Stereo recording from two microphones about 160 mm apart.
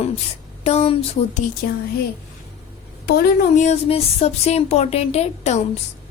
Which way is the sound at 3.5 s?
45° left (ahead or behind).